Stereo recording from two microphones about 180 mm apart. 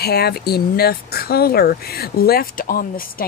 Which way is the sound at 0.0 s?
60° left (ahead or behind).